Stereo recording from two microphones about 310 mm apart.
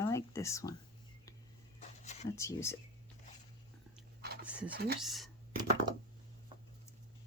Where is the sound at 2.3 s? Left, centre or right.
Centre.